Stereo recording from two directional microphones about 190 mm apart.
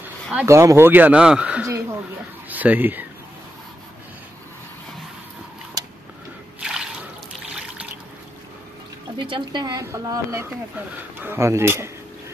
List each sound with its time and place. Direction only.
0.0 s speech: 10° right (ahead or behind)
6.6 s trickle: 5° right (ahead or behind)
9.2 s a woman's voice: 25° right (ahead or behind)